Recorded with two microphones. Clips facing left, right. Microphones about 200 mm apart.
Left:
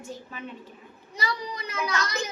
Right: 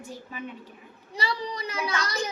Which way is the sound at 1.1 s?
30° right (ahead or behind).